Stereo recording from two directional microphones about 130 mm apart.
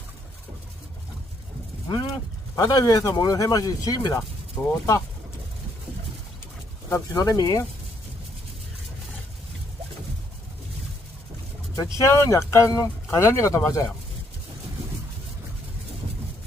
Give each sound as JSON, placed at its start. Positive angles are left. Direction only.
{"t": 1.9, "sound": "speech", "side_deg": 35}
{"t": 6.9, "sound": "speech", "side_deg": 25}
{"t": 11.8, "sound": "speech", "side_deg": 25}